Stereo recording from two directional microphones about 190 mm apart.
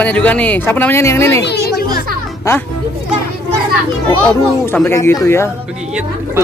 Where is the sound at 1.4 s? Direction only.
55° left (ahead or behind).